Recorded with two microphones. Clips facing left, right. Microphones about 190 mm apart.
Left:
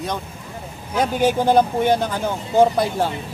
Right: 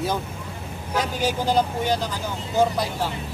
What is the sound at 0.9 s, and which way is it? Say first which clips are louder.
Speech: left 6 dB; 55° left (ahead or behind).